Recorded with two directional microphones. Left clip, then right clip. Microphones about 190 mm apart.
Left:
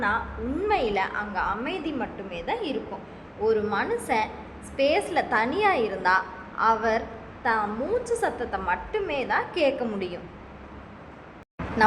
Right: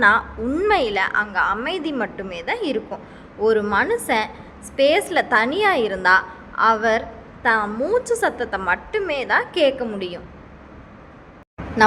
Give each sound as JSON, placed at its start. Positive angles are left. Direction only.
{"t": 0.0, "sound": "a woman's voice", "side_deg": -30}